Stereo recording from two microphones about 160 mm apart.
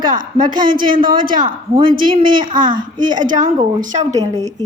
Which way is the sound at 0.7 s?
60° right (ahead or behind).